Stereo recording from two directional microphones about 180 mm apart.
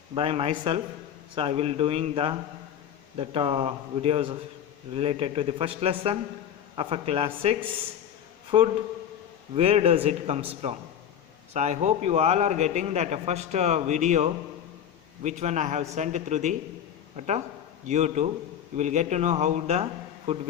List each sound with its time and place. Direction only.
0.1 s a man's voice: 30° right (ahead or behind)
8.5 s a man's voice: 35° right (ahead or behind)